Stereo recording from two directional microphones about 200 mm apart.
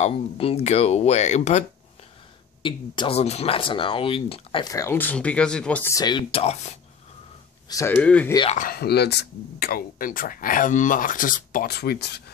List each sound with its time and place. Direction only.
0.0 s speech: 30° left (ahead or behind)
2.6 s speech: 25° left (ahead or behind)
7.6 s speech: 15° left (ahead or behind)
8.5 s speech: 45° left (ahead or behind)